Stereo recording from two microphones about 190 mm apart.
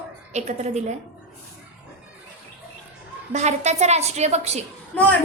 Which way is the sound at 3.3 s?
35° right (ahead or behind).